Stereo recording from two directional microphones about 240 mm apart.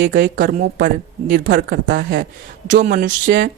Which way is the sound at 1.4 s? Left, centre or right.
Right.